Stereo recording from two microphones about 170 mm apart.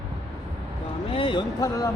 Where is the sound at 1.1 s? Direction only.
30° left (ahead or behind).